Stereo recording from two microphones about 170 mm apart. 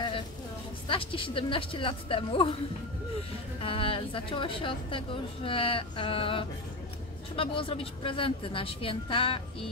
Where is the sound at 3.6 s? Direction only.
30° left (ahead or behind).